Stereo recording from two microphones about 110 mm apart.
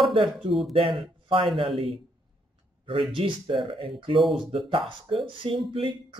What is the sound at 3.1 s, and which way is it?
Speech, 50° right (ahead or behind).